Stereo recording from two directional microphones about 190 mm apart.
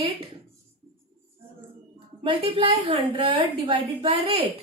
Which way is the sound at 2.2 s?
30° right (ahead or behind).